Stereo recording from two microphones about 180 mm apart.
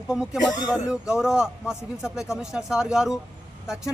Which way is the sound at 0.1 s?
5° right (ahead or behind).